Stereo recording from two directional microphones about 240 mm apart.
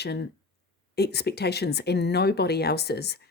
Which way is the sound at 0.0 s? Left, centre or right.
Left.